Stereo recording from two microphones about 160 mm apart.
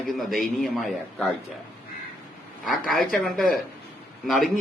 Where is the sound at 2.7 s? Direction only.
Centre (ahead or behind).